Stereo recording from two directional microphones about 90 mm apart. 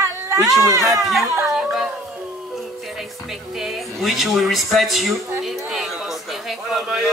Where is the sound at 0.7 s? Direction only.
35° right (ahead or behind).